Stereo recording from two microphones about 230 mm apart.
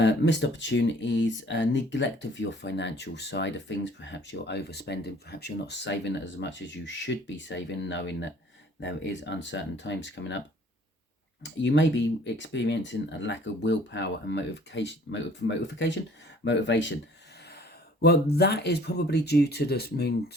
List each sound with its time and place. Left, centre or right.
0.0 s speech: left
11.6 s speech: left
18.0 s speech: left